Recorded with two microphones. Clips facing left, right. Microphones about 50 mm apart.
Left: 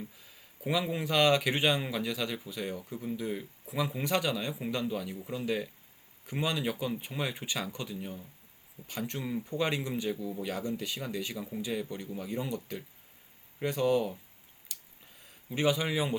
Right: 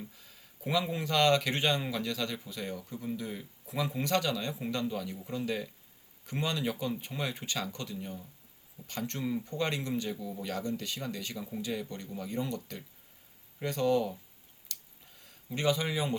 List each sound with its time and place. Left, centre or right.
0.2 s speech: centre
15.2 s a man's voice: centre